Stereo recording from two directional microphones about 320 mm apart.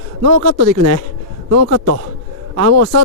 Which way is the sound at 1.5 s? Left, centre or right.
Right.